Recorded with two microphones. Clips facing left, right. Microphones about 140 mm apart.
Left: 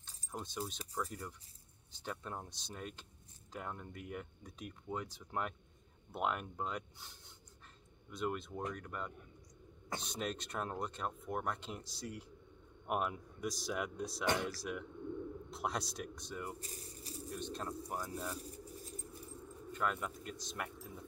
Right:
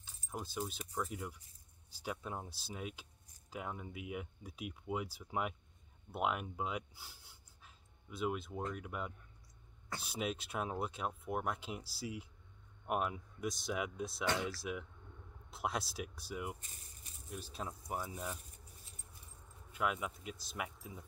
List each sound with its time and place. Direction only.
0.0 s speech: 5° right (ahead or behind)
16.5 s rattle: 35° left (ahead or behind)
17.3 s speech: 5° right (ahead or behind)
18.4 s vehicle: 40° left (ahead or behind)
19.7 s speech: 5° right (ahead or behind)